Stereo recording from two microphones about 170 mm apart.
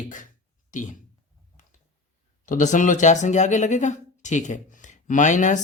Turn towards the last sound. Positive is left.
turn(degrees=45)  # may be behind; listen again after turning